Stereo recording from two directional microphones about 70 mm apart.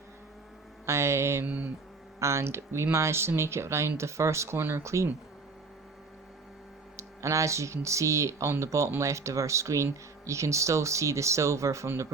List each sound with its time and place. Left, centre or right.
0.9 s speech: right
1.5 s speech: right
2.1 s speech: right
6.9 s speech: right